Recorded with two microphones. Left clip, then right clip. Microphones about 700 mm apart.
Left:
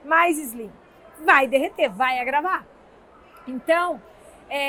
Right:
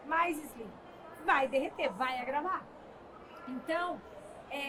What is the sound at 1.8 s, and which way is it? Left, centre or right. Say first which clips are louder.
Speech: left 12 dB; left.